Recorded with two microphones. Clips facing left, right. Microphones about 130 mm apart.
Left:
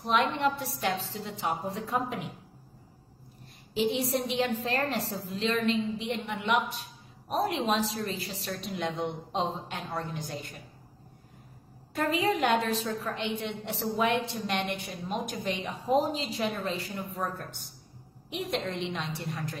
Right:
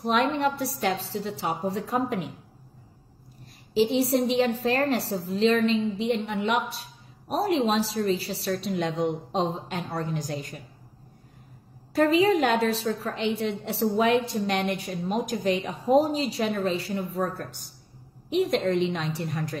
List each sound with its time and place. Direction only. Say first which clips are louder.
0.0 s a woman's voice: right 3 dB; 35° right (ahead or behind)
3.7 s a woman's voice: right 6 dB; 35° right (ahead or behind)
11.9 s a woman's voice: right 7 dB; 40° right (ahead or behind)